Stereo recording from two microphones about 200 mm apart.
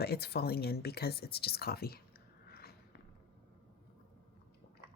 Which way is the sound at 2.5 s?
50° left (ahead or behind).